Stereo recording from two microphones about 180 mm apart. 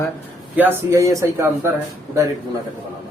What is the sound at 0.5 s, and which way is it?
Speech, 15° right (ahead or behind).